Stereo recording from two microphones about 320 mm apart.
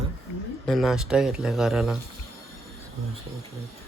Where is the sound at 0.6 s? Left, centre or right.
Centre.